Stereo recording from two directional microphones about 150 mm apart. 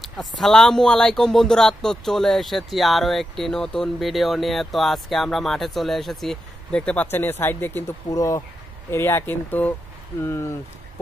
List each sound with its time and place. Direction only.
0.0 s speech: centre (ahead or behind); by 10.5 s 15° left (ahead or behind)